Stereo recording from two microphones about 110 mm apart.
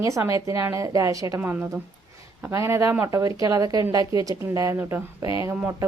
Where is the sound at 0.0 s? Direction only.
30° right (ahead or behind).